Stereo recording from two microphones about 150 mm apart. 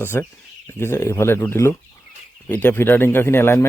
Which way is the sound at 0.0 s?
15° left (ahead or behind).